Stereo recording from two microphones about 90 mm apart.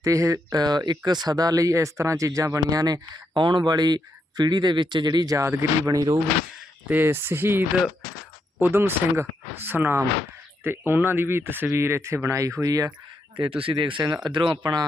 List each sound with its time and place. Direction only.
0.0 s speech: 40° right (ahead or behind)
3.3 s speech: 60° right (ahead or behind); by 6.1 s 40° right (ahead or behind)
6.8 s speech: 20° right (ahead or behind)
8.6 s speech: 25° right (ahead or behind); by 12.9 s 40° right (ahead or behind)
13.3 s speech: 80° right; by 14.8 s 50° right (ahead or behind)